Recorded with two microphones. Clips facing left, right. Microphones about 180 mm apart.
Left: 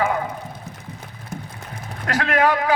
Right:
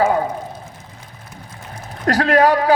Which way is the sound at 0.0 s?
35° right (ahead or behind).